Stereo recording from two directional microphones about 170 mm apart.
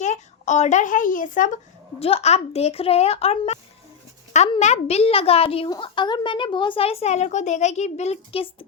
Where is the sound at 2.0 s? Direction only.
35° left (ahead or behind).